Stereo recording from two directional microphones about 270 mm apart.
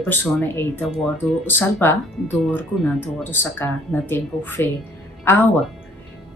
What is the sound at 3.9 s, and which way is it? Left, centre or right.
Speech, centre.